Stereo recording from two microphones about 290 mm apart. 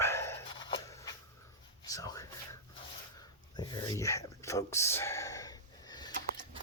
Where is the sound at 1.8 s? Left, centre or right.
Centre.